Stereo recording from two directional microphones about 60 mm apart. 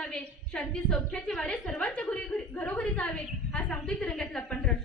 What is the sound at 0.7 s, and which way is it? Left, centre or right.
A woman's voice, centre.